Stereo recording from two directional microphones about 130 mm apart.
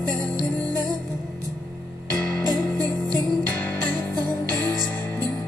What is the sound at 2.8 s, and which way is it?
Music, 30° right (ahead or behind).